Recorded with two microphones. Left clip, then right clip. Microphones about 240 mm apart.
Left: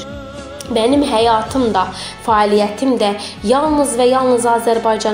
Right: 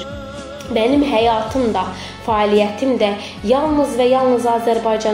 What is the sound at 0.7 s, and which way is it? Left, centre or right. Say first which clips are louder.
A woman's voice: left 1 dB; left.